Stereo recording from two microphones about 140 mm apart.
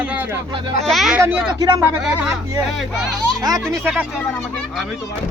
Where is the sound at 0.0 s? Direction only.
10° right (ahead or behind).